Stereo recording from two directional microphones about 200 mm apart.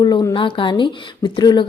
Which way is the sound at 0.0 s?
20° left (ahead or behind).